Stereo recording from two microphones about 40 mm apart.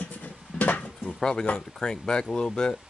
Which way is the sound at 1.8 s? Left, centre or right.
Centre.